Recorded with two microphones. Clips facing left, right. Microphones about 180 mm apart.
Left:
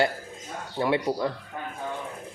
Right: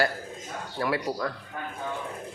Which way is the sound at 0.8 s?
25° left (ahead or behind).